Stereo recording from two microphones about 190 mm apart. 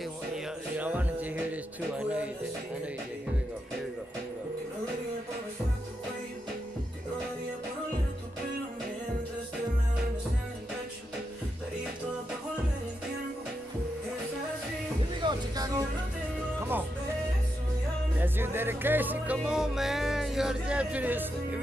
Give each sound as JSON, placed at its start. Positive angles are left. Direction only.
{"t": 0.7, "sound": "music", "side_deg": -10}
{"t": 15.1, "sound": "music", "side_deg": -20}
{"t": 18.2, "sound": "speech", "side_deg": -10}